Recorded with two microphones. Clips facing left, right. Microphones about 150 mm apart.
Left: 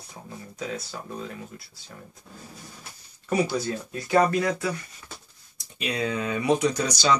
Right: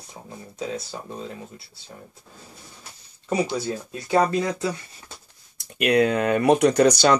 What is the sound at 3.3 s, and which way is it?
Speech, 20° right (ahead or behind).